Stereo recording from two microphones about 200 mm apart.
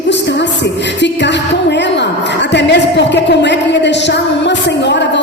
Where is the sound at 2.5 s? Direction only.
60° left (ahead or behind).